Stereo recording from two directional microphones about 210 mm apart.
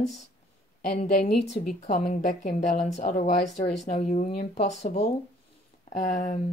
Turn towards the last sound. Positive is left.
turn(degrees=35)  # may be behind; listen again after turning